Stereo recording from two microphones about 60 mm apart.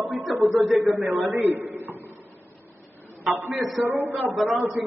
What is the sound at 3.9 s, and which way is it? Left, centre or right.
Speech, right.